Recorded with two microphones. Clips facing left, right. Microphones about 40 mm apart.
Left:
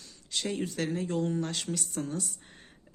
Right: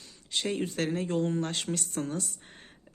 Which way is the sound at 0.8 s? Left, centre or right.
Right.